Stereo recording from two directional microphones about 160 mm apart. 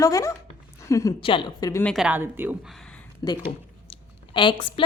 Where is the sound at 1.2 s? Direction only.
30° left (ahead or behind).